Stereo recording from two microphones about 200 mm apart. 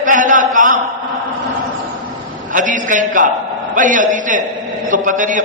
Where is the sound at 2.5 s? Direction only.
40° right (ahead or behind).